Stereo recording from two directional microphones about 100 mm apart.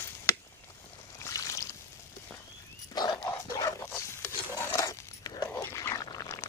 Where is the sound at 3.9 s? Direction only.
25° left (ahead or behind).